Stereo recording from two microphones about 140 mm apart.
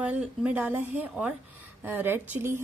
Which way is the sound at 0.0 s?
10° right (ahead or behind).